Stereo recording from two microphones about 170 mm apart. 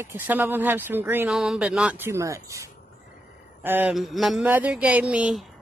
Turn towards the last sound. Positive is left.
turn(degrees=-5)  # may be behind; listen again after turning